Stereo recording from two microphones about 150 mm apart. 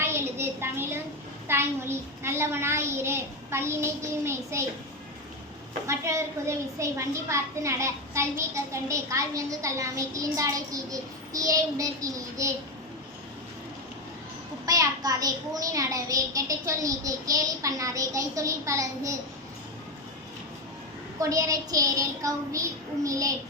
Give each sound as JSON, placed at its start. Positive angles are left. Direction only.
{"t": 0.0, "sound": "a sound", "side_deg": -15}
{"t": 1.5, "sound": "a child's voice", "side_deg": -15}
{"t": 5.8, "sound": "a child's voice", "side_deg": -20}
{"t": 14.7, "sound": "a child's voice", "side_deg": -25}
{"t": 21.2, "sound": "a child's voice", "side_deg": -20}